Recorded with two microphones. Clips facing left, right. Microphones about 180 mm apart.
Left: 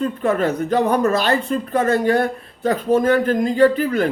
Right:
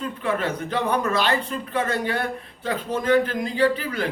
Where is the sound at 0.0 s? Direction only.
45° left (ahead or behind).